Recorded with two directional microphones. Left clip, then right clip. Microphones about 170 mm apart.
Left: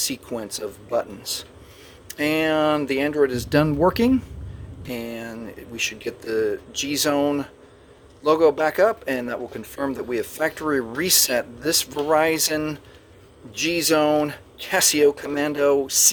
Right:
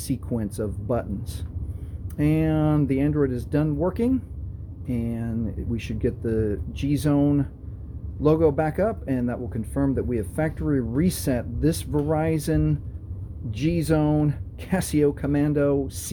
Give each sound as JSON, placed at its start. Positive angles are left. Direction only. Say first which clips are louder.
{"t": 0.0, "sound": "speech", "louder": "left 2 dB", "side_deg": 10}